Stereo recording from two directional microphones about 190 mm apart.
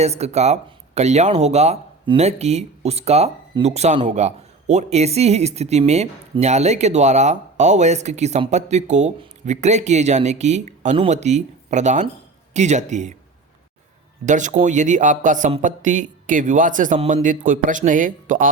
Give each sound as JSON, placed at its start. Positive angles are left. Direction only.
{"t": 0.0, "sound": "speech", "side_deg": -35}
{"t": 14.3, "sound": "a man's voice", "side_deg": -40}